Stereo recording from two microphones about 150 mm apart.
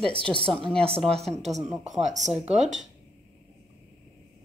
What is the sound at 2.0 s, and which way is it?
Speech, 50° right (ahead or behind).